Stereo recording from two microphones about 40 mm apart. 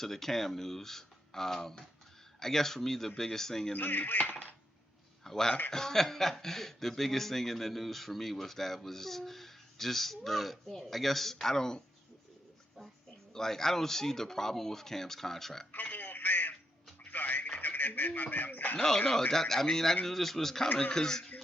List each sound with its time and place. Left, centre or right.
0.0 s speech: centre
3.8 s speech: left
5.2 s speech: centre
13.3 s speech: centre
15.7 s telephone: left
17.0 s radio: left
17.6 s speech: left
18.8 s speech: centre